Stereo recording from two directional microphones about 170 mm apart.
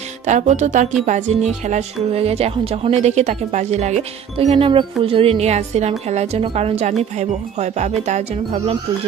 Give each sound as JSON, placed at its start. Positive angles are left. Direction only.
{"t": 0.3, "sound": "music", "side_deg": -45}
{"t": 1.0, "sound": "speech", "side_deg": -45}